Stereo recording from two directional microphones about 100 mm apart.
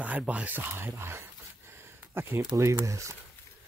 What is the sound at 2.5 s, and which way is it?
Speech, 30° right (ahead or behind).